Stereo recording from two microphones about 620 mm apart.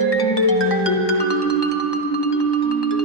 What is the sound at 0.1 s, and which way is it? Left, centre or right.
Music, left.